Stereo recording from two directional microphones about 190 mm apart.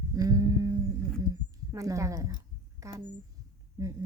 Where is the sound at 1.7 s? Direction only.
15° right (ahead or behind).